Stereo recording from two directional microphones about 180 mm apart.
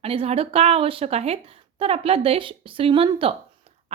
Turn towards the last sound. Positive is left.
turn(degrees=-30)  # may be behind; listen again after turning